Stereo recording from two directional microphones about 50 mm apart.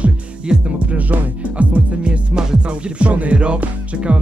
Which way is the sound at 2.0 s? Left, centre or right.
Centre.